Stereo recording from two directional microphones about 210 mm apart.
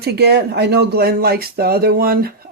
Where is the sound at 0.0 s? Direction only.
50° right (ahead or behind).